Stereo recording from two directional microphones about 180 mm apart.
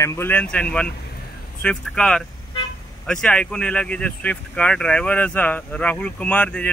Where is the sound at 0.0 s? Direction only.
15° left (ahead or behind).